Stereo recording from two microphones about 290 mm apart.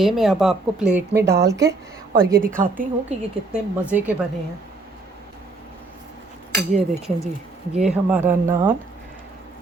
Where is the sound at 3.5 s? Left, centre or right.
Centre.